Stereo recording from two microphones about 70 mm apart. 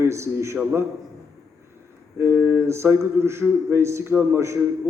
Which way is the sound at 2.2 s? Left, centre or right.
Right.